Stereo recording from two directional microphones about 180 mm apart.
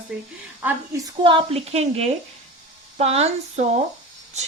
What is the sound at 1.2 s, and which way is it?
A woman's voice, 30° right (ahead or behind).